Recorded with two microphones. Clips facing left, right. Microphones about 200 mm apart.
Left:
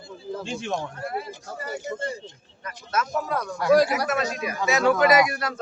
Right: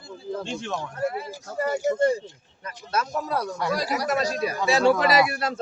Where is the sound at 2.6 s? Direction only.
30° right (ahead or behind).